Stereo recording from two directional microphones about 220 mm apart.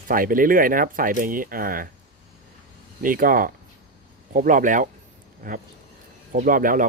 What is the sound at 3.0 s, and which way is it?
Speech, 40° right (ahead or behind).